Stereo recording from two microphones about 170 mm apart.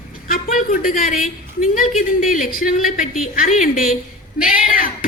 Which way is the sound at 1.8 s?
55° left (ahead or behind).